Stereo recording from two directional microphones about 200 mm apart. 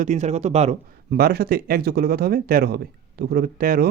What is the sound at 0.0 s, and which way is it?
Speech, 35° right (ahead or behind).